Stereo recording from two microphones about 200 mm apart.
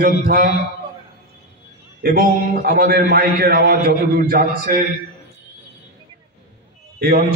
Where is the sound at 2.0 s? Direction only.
50° right (ahead or behind).